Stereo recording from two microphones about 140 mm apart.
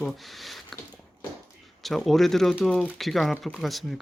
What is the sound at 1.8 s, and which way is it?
Speech, centre (ahead or behind).